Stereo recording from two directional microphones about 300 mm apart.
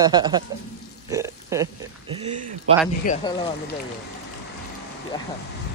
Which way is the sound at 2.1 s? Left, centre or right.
Centre.